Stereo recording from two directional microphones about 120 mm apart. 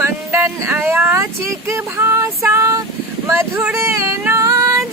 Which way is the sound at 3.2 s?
25° right (ahead or behind).